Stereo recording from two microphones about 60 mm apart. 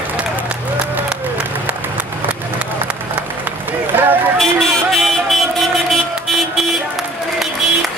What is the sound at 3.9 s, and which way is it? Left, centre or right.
Run, right.